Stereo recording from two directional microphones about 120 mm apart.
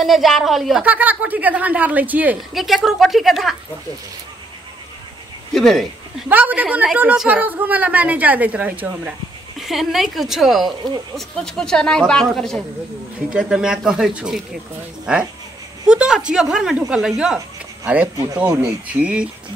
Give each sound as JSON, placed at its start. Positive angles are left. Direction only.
{"t": 0.0, "sound": "speech", "side_deg": 0}
{"t": 0.8, "sound": "a woman's voice", "side_deg": -15}
{"t": 2.5, "sound": "speech", "side_deg": 0}
{"t": 5.5, "sound": "speech", "side_deg": 5}
{"t": 6.2, "sound": "a woman's voice", "side_deg": -15}
{"t": 9.6, "sound": "a woman's voice", "side_deg": 0}
{"t": 15.9, "sound": "a woman's voice", "side_deg": -5}
{"t": 18.1, "sound": "speech", "side_deg": -25}
{"t": 18.9, "sound": "a woman's voice", "side_deg": -10}